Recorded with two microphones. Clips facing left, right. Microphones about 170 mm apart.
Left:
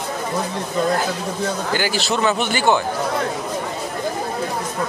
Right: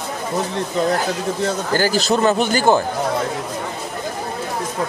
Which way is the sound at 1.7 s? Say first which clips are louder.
Right 4 dB; 40° right (ahead or behind).